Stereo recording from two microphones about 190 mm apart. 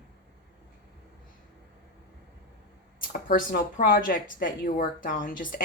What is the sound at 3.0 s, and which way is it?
Speech, 45° left (ahead or behind).